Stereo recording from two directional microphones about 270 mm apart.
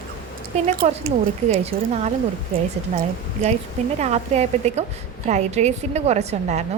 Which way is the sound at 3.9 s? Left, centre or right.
Right.